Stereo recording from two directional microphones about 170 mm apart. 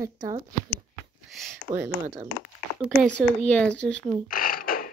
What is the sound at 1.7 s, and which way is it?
Speech, 30° right (ahead or behind).